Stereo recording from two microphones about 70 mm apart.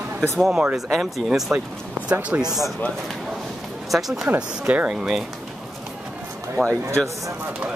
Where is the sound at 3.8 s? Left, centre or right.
Centre.